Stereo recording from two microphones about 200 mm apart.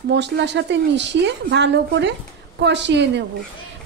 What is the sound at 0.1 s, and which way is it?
Speech, 60° right (ahead or behind).